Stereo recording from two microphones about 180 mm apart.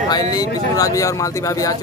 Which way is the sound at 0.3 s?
20° left (ahead or behind).